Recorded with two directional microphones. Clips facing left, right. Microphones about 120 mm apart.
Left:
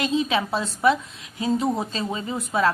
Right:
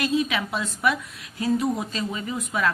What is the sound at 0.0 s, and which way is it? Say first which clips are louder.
A woman's voice: left 1 dB; 25° left (ahead or behind).